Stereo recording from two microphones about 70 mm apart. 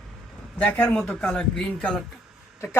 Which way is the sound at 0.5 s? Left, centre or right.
Left.